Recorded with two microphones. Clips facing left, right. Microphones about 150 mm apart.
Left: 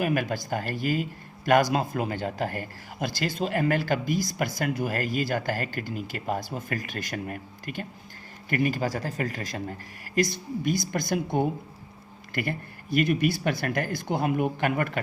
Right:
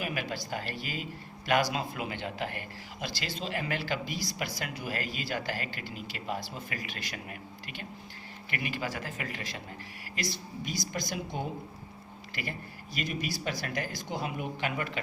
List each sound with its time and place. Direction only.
0.0 s a man's voice: 50° left (ahead or behind)